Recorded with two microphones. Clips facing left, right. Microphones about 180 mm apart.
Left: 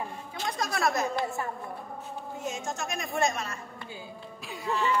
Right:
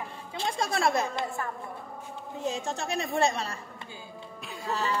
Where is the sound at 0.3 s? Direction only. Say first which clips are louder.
Right 3 dB; 25° right (ahead or behind).